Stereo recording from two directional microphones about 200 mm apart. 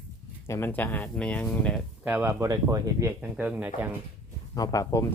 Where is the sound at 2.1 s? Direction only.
10° right (ahead or behind).